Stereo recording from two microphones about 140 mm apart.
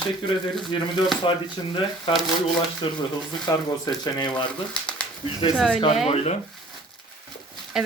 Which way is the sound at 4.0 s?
30° left (ahead or behind).